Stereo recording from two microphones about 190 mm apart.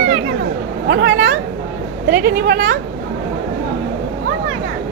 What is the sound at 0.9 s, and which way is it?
Speech, 65° right (ahead or behind).